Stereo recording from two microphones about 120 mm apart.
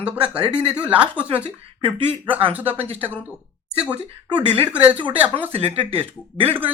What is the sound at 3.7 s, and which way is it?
Speech, 10° right (ahead or behind).